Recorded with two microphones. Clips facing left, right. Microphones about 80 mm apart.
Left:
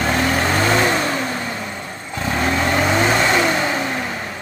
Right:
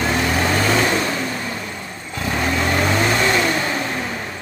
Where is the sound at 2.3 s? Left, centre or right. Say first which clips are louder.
Left 1 dB; centre.